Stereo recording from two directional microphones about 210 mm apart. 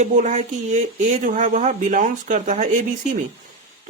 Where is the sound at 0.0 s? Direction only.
35° right (ahead or behind).